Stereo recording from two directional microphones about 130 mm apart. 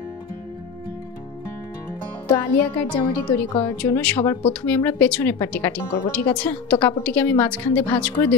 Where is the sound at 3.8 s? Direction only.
15° left (ahead or behind).